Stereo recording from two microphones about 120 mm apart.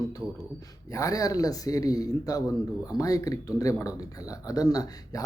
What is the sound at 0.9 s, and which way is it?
Speech, 30° left (ahead or behind).